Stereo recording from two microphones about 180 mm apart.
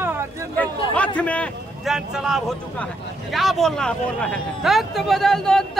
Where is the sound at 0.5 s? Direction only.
10° left (ahead or behind).